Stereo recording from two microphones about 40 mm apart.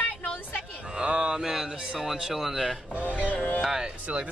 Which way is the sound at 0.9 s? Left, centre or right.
Right.